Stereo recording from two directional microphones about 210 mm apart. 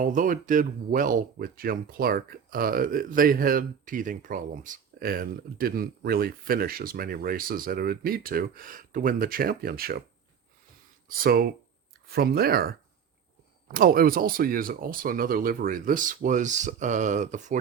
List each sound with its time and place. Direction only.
0.0 s speech: 40° right (ahead or behind)
11.2 s speech: 45° right (ahead or behind)